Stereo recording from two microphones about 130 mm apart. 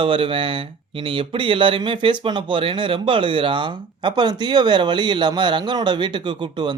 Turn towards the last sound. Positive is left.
turn(degrees=-35)  # may be behind; listen again after turning